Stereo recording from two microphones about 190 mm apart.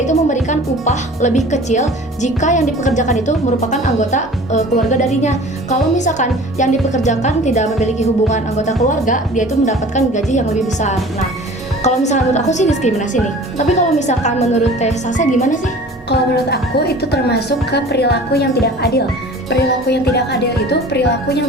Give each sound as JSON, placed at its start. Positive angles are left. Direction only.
{"t": 0.0, "sound": "speech", "side_deg": 40}
{"t": 16.0, "sound": "a woman's voice", "side_deg": 60}